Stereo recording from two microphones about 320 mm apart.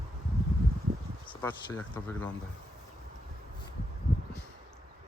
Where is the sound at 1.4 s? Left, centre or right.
Centre.